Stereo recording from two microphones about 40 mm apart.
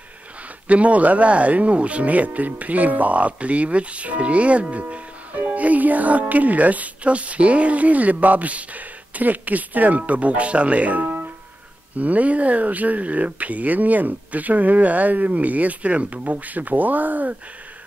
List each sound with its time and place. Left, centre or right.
0.7 s speech: right